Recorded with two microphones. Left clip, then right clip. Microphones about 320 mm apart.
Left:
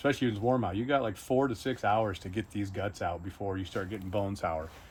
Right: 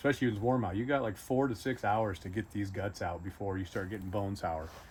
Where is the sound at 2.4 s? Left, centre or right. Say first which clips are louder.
Left 1 dB; left.